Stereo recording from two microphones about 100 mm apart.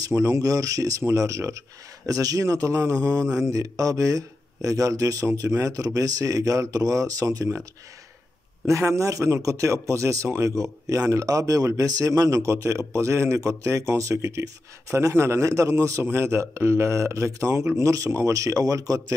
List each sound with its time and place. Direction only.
0.0 s speech: 30° right (ahead or behind)
8.6 s speech: 30° right (ahead or behind)